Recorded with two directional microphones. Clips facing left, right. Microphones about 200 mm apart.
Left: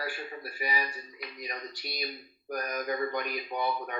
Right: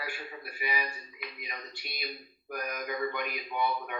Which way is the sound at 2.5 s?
40° left (ahead or behind).